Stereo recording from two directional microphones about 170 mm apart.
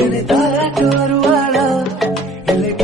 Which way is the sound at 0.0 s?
Centre (ahead or behind).